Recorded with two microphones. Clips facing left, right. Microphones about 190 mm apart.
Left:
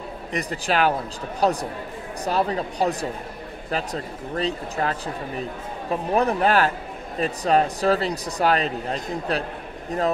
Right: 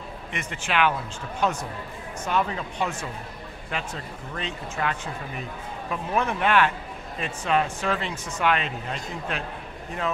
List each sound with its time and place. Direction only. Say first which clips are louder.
0.3 s speech: left 5 dB; 35° left (ahead or behind)